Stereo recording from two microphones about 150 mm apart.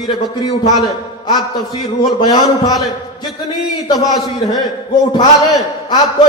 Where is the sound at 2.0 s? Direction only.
30° left (ahead or behind).